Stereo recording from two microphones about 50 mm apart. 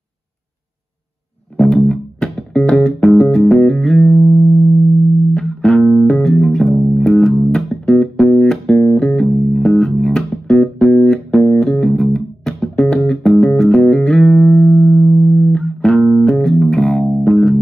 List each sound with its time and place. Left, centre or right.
1.6 s music: centre
5.3 s music: centre
5.8 s music: centre
6.0 s bass guitar: centre
6.9 s music: centre
15.3 s music: centre
15.6 s music: centre